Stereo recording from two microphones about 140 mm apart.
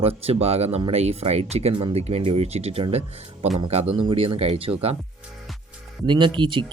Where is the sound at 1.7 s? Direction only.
35° right (ahead or behind).